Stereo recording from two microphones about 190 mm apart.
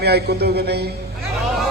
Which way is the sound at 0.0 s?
60° right (ahead or behind).